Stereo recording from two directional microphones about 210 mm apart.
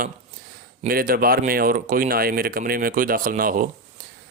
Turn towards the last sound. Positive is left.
turn(degrees=-40)  # may be behind; listen again after turning